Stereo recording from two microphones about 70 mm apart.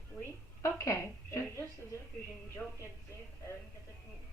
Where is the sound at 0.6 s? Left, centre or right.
Left.